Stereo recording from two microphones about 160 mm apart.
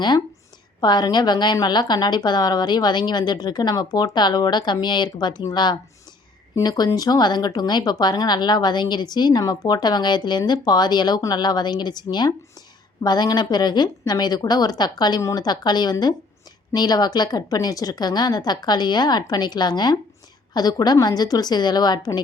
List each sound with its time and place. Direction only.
0.8 s speech: 25° left (ahead or behind)